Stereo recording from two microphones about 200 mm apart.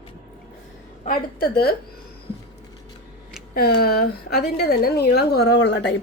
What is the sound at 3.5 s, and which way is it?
A woman's voice, 50° left (ahead or behind).